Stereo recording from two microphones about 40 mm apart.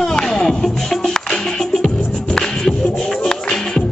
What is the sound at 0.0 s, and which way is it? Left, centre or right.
Music, centre.